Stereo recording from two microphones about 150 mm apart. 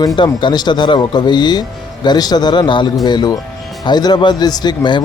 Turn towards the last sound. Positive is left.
turn(degrees=30)  # may be behind; listen again after turning